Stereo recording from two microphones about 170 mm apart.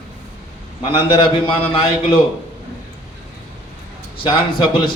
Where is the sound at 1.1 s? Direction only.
30° left (ahead or behind).